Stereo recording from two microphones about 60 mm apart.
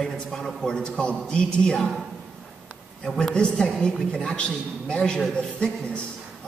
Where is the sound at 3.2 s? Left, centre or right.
Centre.